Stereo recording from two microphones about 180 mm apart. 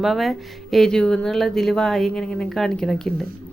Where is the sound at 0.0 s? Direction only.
Centre (ahead or behind).